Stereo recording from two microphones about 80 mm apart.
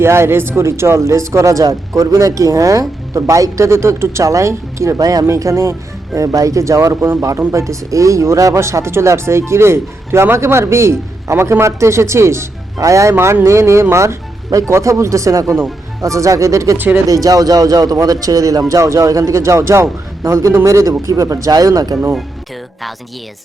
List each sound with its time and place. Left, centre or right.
0.0 s speech: right
5.2 s a man's voice: right
16.7 s speech: right
17.1 s a man's voice: right